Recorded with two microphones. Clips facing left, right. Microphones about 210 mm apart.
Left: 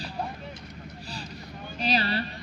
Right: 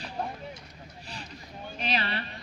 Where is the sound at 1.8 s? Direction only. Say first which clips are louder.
Left 5 dB; 35° left (ahead or behind).